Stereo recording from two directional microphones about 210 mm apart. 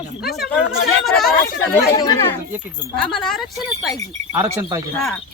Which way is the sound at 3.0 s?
Centre (ahead or behind).